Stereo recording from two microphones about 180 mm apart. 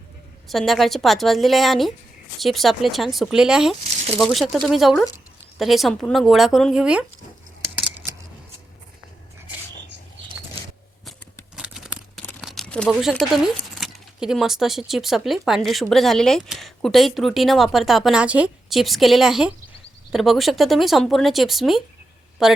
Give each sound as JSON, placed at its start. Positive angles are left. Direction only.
{"t": 0.4, "sound": "speech", "side_deg": 0}
{"t": 3.8, "sound": "speech", "side_deg": -35}
{"t": 4.2, "sound": "speech", "side_deg": 0}
{"t": 11.5, "sound": "tearing", "side_deg": -5}
{"t": 12.4, "sound": "speech", "side_deg": 0}